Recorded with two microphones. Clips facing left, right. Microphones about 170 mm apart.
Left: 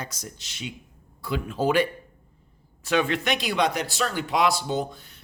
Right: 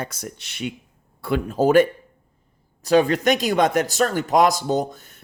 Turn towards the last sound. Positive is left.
turn(degrees=-50)  # may be behind; listen again after turning